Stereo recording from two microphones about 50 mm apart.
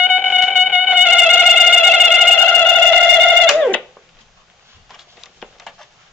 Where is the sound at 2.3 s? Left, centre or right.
Centre.